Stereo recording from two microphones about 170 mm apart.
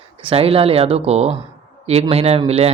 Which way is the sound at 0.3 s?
35° right (ahead or behind).